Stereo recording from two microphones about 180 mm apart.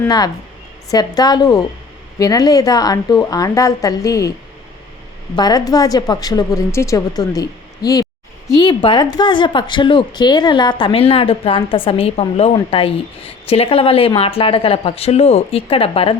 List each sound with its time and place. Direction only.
0.9 s speech: 20° left (ahead or behind)
5.4 s speech: 20° left (ahead or behind)